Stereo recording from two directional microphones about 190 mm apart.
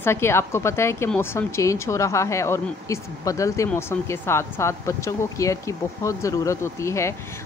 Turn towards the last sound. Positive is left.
turn(degrees=15)  # may be behind; listen again after turning